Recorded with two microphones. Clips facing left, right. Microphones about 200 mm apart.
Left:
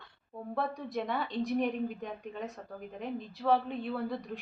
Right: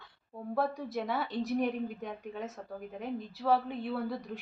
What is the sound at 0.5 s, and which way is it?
A woman's voice, centre (ahead or behind).